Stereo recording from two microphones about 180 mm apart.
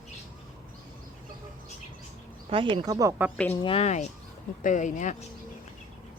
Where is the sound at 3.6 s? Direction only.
35° left (ahead or behind).